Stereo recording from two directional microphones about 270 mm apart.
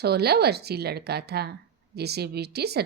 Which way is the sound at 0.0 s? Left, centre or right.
Right.